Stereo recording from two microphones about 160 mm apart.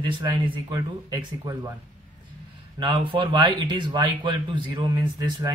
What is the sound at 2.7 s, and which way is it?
Speech, 30° right (ahead or behind).